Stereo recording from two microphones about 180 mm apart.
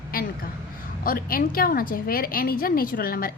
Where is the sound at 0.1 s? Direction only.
55° left (ahead or behind).